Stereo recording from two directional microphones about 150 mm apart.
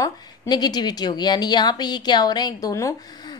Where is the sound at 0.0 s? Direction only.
25° left (ahead or behind).